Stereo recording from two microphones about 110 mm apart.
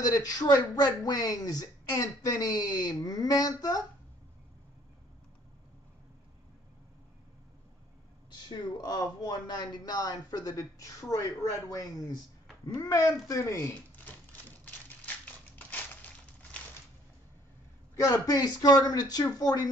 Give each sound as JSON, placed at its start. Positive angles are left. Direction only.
{"t": 0.0, "sound": "speech", "side_deg": 35}
{"t": 8.5, "sound": "speech", "side_deg": 35}
{"t": 14.0, "sound": "typewriter", "side_deg": 15}
{"t": 17.9, "sound": "speech", "side_deg": 30}